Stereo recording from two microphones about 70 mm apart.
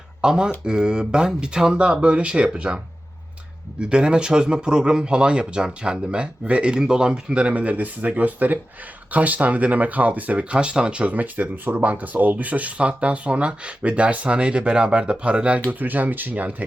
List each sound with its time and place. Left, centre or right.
0.2 s speech: centre